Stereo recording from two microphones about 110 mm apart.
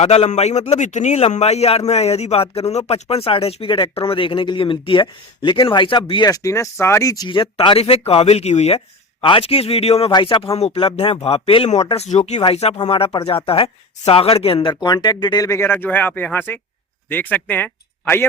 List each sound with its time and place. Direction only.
0.0 s a man's voice: 75° left (ahead or behind); by 7.3 s 30° left (ahead or behind)
7.6 s a man's voice: 55° left (ahead or behind); by 8.8 s 75° left (ahead or behind)
9.2 s a man's voice: 55° left (ahead or behind)
10.1 s a man's voice: 45° left (ahead or behind); by 11.9 s 70° left (ahead or behind)
11.9 s speech: 80° left
12.9 s speech: 60° left (ahead or behind); by 18.3 s 20° left (ahead or behind)